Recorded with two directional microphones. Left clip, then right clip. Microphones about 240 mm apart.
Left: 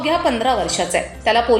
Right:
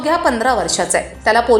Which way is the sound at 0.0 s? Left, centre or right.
Centre.